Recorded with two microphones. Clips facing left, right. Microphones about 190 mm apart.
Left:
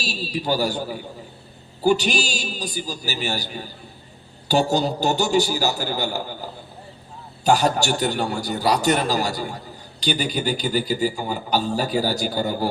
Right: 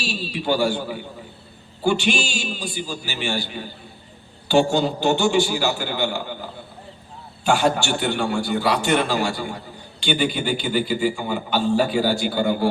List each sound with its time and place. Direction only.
0.0 s a man's voice: 40° left (ahead or behind)
7.4 s a man's voice: 40° left (ahead or behind)